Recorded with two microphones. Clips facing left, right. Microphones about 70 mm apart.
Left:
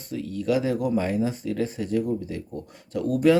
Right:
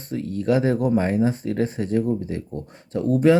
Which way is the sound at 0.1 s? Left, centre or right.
Right.